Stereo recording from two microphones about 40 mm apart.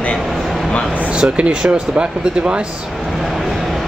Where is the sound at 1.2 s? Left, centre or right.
Right.